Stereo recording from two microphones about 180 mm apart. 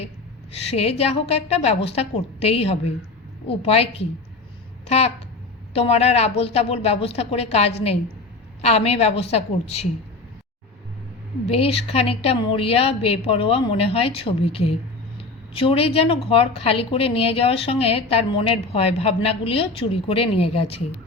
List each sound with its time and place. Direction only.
0.7 s a woman's voice: 35° left (ahead or behind)
11.4 s a woman's voice: 35° left (ahead or behind)